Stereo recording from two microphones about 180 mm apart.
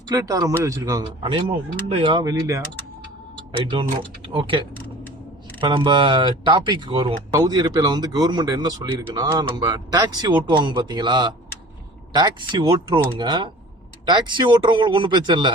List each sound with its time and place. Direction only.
0.1 s speech: 20° right (ahead or behind)
3.6 s speech: 30° right (ahead or behind)